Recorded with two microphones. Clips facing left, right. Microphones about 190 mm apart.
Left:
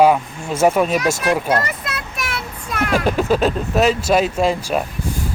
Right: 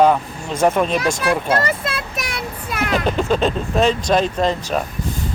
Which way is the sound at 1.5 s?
25° right (ahead or behind).